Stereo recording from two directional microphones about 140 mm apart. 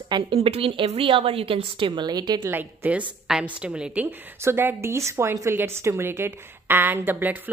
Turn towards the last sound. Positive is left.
turn(degrees=-10)  # may be behind; listen again after turning